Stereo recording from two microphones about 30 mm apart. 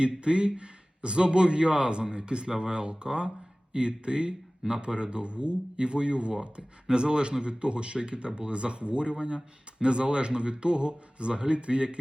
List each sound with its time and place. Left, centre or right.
0.0 s a man's voice: right